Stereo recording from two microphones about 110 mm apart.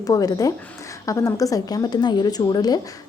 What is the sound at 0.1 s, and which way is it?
Speech, 35° left (ahead or behind).